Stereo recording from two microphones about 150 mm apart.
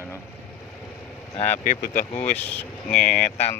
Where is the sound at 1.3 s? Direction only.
50° left (ahead or behind); by 2.1 s 65° left (ahead or behind).